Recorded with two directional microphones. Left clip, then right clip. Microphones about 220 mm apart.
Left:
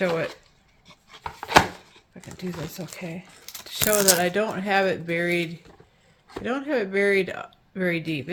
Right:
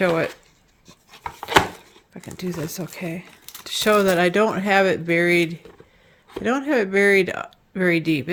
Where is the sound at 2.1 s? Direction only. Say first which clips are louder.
Right 6 dB; 55° right (ahead or behind).